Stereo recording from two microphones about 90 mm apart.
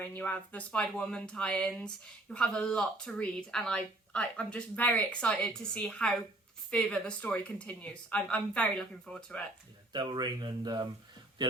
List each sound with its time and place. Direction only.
0.0 s speech: 15° left (ahead or behind)
9.3 s speech: 15° left (ahead or behind)
9.9 s speech: 55° right (ahead or behind)